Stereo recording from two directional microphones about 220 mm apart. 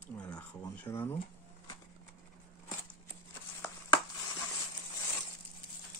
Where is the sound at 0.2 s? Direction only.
5° left (ahead or behind).